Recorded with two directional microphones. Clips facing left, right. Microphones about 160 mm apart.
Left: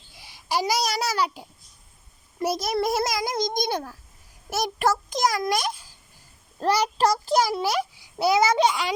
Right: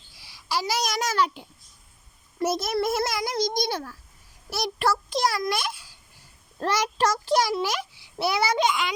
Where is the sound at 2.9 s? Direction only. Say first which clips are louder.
Left 1 dB; 15° left (ahead or behind).